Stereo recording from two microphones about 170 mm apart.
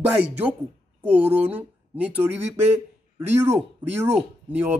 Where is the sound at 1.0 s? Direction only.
10° right (ahead or behind).